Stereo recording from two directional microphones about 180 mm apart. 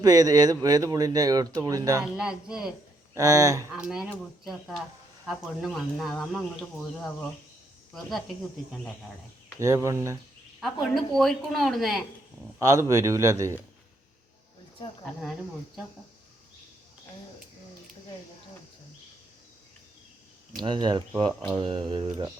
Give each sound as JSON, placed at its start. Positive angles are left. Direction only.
{"t": 0.0, "sound": "speech", "side_deg": -20}
{"t": 2.1, "sound": "a woman's voice", "side_deg": -5}
{"t": 3.2, "sound": "speech", "side_deg": -20}
{"t": 3.8, "sound": "a woman's voice", "side_deg": -5}
{"t": 9.6, "sound": "a man's voice", "side_deg": -15}
{"t": 10.6, "sound": "a woman's voice", "side_deg": 0}
{"t": 12.5, "sound": "a man's voice", "side_deg": -20}
{"t": 20.6, "sound": "speech", "side_deg": -25}